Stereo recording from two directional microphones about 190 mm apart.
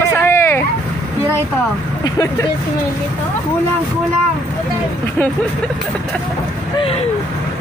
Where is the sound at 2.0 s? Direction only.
15° left (ahead or behind).